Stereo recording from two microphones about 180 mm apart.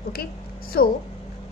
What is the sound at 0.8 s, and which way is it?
Speech, 60° left (ahead or behind).